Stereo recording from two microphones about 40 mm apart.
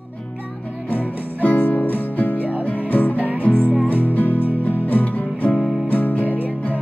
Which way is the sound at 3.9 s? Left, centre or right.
Left.